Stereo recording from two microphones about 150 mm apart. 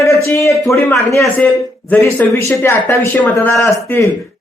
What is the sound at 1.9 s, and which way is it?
A woman's voice, 15° left (ahead or behind).